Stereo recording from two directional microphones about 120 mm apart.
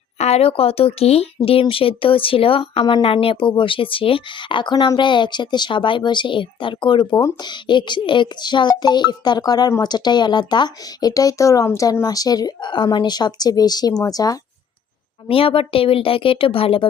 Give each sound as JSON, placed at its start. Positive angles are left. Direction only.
{"t": 0.2, "sound": "speech", "side_deg": 60}
{"t": 15.3, "sound": "speech", "side_deg": 50}